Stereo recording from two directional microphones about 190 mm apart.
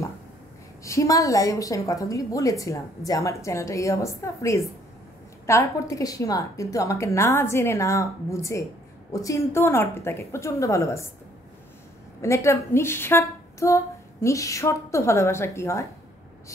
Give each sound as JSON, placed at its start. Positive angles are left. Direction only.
{"t": 0.8, "sound": "a woman's voice", "side_deg": 15}
{"t": 12.2, "sound": "a woman's voice", "side_deg": 15}